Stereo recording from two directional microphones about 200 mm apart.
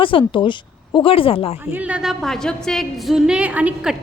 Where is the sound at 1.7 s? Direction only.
5° right (ahead or behind).